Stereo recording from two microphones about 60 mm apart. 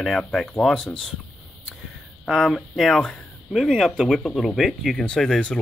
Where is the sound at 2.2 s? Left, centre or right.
Centre.